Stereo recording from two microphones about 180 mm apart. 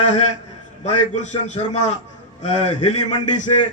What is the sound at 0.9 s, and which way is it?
A man's voice, 40° left (ahead or behind).